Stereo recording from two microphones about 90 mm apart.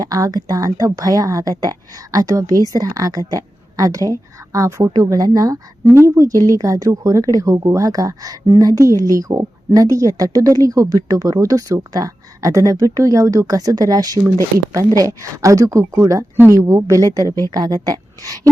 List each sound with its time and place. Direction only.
0.0 s a woman's voice: 45° right (ahead or behind)
5.8 s a woman's voice: 30° right (ahead or behind)